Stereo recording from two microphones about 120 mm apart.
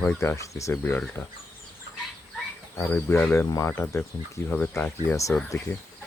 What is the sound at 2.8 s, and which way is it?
Speech, 20° left (ahead or behind).